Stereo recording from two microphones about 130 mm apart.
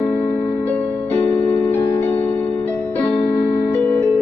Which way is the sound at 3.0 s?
50° left (ahead or behind).